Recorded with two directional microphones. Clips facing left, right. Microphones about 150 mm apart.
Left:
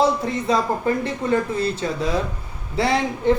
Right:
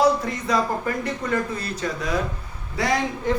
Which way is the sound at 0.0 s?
25° left (ahead or behind).